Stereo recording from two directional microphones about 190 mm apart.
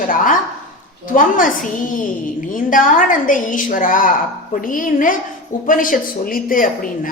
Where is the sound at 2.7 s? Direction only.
45° left (ahead or behind).